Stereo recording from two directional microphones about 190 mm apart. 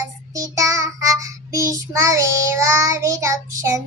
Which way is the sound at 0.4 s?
15° right (ahead or behind).